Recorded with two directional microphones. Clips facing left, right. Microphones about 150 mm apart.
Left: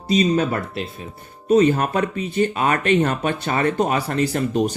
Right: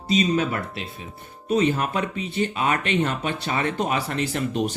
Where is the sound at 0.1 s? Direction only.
40° left (ahead or behind).